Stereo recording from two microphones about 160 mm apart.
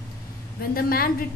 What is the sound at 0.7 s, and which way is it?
Speech, 65° left (ahead or behind).